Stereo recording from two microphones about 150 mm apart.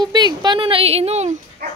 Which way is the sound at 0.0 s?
30° right (ahead or behind).